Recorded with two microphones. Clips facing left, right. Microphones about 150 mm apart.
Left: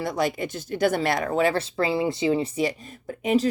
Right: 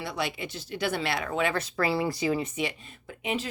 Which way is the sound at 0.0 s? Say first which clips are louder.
Left 7 dB; 45° left (ahead or behind).